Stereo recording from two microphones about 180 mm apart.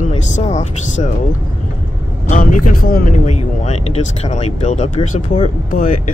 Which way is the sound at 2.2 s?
45° left (ahead or behind).